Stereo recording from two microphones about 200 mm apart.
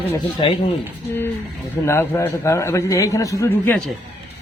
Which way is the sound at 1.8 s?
15° left (ahead or behind).